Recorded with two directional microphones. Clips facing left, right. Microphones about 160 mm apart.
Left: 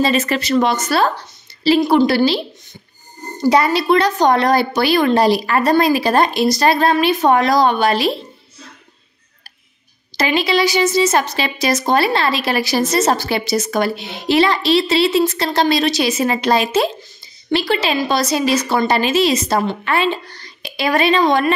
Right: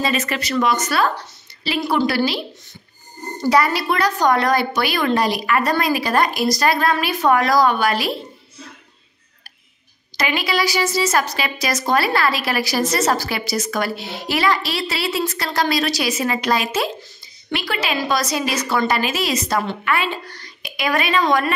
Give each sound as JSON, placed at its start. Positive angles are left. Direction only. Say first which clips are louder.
{"t": 0.0, "sound": "a woman's voice", "louder": "left 5 dB", "side_deg": 30}
{"t": 3.4, "sound": "a woman's voice", "louder": "left 4 dB", "side_deg": 25}
{"t": 10.1, "sound": "a woman's voice", "louder": "left 5 dB", "side_deg": 30}